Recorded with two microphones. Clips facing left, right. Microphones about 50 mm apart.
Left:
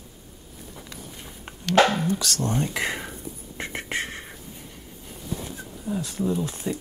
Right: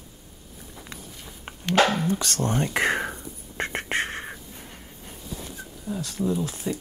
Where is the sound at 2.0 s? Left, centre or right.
Right.